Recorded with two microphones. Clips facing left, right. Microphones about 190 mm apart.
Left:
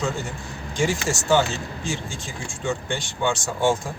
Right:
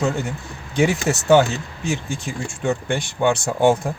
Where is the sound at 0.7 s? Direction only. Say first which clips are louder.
Right 5 dB; 60° right (ahead or behind).